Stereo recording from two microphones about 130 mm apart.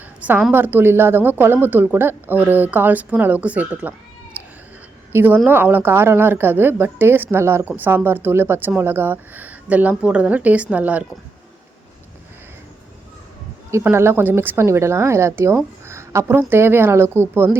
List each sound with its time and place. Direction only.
0.3 s a woman's voice: 10° right (ahead or behind)
4.4 s cat: 10° right (ahead or behind)
5.1 s a woman's voice: 15° right (ahead or behind)
13.7 s speech: 20° right (ahead or behind)